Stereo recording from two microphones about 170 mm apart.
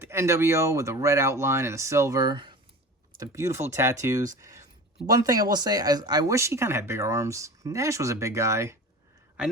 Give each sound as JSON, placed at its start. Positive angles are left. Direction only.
{"t": 0.0, "sound": "speech", "side_deg": -15}